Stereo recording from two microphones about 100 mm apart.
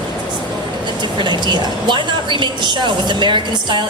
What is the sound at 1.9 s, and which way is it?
A woman's voice, 50° right (ahead or behind).